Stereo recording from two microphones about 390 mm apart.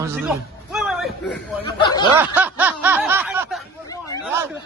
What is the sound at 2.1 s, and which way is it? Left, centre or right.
Speech, centre.